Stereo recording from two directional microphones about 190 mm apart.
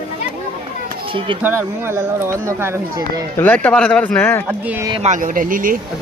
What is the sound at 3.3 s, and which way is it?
Speech, 10° left (ahead or behind).